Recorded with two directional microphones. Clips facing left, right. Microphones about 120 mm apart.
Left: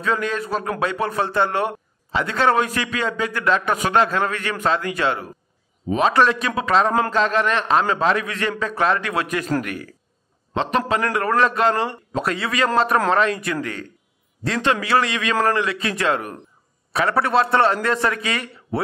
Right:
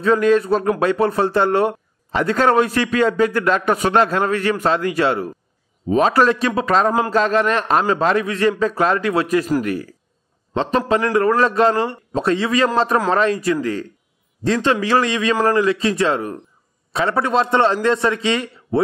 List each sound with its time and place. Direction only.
0.0 s a man's voice: 40° right (ahead or behind)
11.0 s a man's voice: 30° right (ahead or behind)